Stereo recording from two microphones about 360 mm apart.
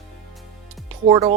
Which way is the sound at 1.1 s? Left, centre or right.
Centre.